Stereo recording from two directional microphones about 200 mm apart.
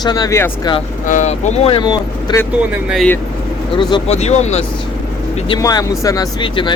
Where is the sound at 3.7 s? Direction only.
25° left (ahead or behind).